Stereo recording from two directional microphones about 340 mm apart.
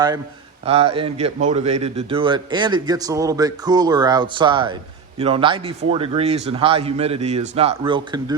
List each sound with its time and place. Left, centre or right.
0.6 s a man's voice: centre